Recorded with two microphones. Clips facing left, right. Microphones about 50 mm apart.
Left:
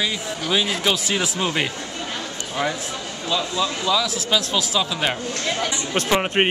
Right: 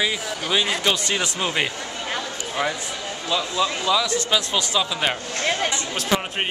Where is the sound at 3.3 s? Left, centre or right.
Centre.